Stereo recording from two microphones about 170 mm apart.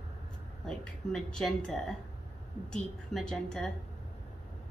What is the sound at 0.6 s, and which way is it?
Speech, 5° left (ahead or behind).